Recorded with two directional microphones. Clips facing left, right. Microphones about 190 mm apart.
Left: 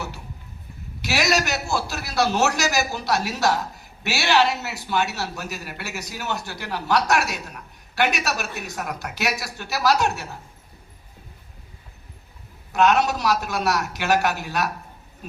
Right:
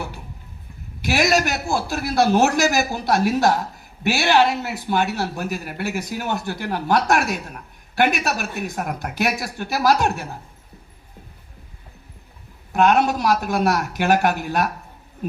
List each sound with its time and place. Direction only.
1.0 s speech: 50° right (ahead or behind)
12.7 s speech: 50° right (ahead or behind)